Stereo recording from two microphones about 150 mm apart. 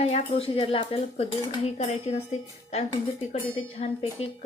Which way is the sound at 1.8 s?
45° left (ahead or behind).